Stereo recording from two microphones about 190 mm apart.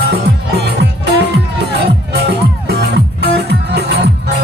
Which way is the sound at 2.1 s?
60° right (ahead or behind).